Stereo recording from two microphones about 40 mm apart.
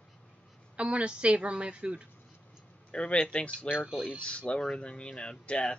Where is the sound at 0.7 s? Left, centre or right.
Right.